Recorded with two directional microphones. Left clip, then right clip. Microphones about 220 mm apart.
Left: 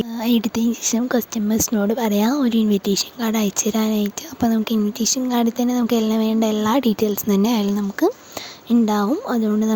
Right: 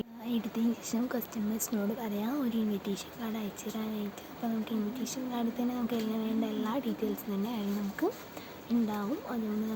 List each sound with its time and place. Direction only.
0.2 s speech: 45° left (ahead or behind)